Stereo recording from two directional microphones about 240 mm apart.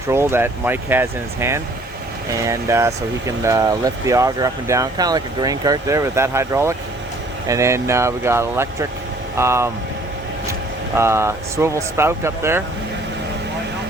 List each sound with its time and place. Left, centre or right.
0.1 s speech: centre
10.9 s speech: centre